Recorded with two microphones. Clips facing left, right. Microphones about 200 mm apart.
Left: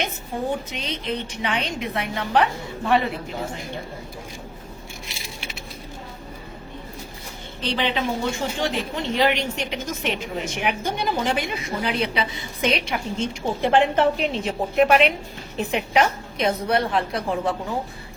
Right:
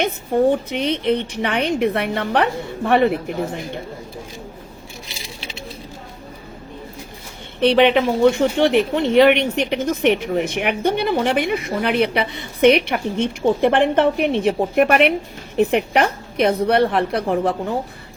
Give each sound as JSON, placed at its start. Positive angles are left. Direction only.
{"t": 0.7, "sound": "speech", "side_deg": -60}
{"t": 7.6, "sound": "speech", "side_deg": -60}